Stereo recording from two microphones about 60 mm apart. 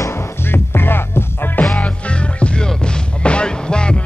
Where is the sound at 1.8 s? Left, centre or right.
Centre.